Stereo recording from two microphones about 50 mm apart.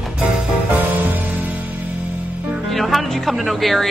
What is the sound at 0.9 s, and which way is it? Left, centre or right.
Music, right.